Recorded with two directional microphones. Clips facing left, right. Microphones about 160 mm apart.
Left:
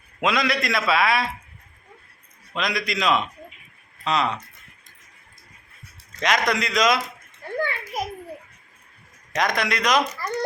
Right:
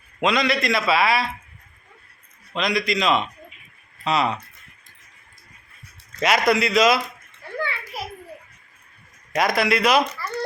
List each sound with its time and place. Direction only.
0.2 s a man's voice: centre (ahead or behind)
2.5 s a man's voice: centre (ahead or behind)
6.1 s a man's voice: 5° right (ahead or behind)
7.6 s children playing: 45° left (ahead or behind)
9.3 s a man's voice: 5° right (ahead or behind)
10.2 s speech: 15° left (ahead or behind)